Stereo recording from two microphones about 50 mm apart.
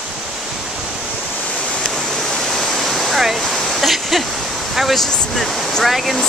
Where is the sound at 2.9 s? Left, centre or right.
Centre.